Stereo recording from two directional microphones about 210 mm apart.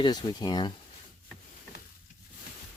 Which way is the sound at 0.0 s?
20° left (ahead or behind).